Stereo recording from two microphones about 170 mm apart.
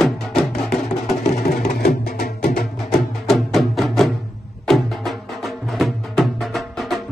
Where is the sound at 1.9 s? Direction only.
65° left (ahead or behind).